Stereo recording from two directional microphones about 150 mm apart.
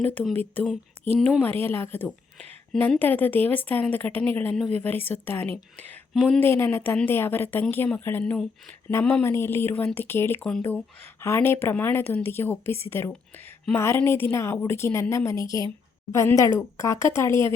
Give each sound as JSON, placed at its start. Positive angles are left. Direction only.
{"t": 0.0, "sound": "a woman's voice", "side_deg": 10}
{"t": 1.4, "sound": "a woman's voice", "side_deg": 15}